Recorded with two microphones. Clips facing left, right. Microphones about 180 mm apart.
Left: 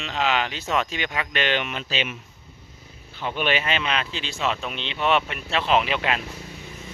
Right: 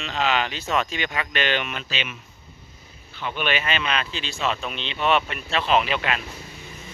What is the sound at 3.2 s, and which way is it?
Speech, 35° left (ahead or behind).